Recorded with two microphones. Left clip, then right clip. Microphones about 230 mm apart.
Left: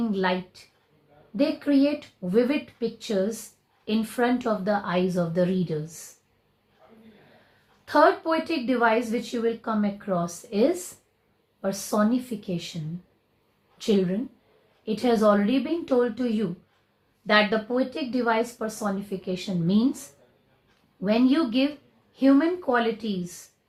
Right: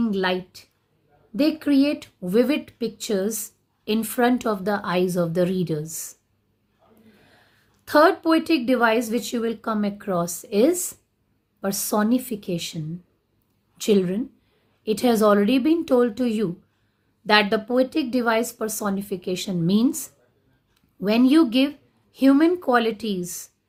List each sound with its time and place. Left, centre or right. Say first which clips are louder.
0.0 s a woman's voice: right 2 dB; right
7.9 s speech: right 3 dB; right
13.7 s a woman's voice: right 4 dB; right
21.0 s speech: right 5 dB; right